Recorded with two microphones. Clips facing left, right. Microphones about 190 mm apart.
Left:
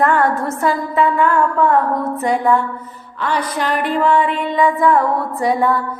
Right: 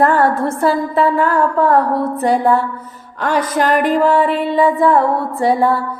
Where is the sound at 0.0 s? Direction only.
35° right (ahead or behind).